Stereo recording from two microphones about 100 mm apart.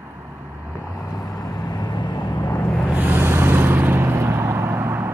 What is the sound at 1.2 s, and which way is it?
Vehicle, 40° left (ahead or behind).